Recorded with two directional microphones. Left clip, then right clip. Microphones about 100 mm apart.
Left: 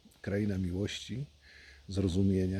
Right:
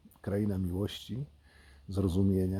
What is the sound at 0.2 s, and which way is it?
Speech, 25° left (ahead or behind).